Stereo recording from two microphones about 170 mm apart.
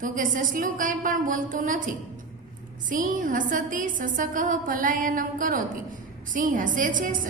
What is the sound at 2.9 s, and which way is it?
A woman's voice, 50° right (ahead or behind).